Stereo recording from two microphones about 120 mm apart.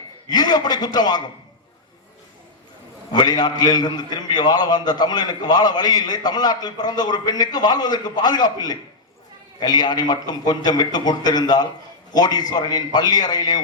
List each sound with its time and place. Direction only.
0.3 s a man's voice: 35° left (ahead or behind)
3.1 s a man's voice: 35° left (ahead or behind)